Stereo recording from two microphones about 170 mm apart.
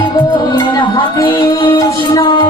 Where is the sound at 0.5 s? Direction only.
30° left (ahead or behind).